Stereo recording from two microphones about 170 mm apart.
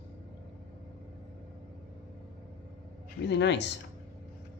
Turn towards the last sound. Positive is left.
turn(degrees=90)